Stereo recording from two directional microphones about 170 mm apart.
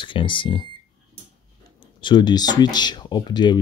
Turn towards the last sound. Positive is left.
turn(degrees=25)  # may be behind; listen again after turning